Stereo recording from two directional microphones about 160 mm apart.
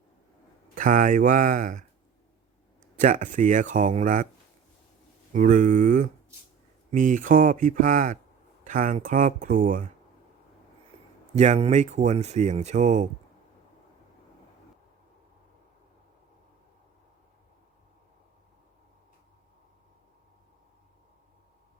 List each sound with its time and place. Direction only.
0.8 s speech: 55° right (ahead or behind)
3.0 s speech: 50° right (ahead or behind)
5.3 s speech: 50° right (ahead or behind)
11.3 s speech: 45° right (ahead or behind)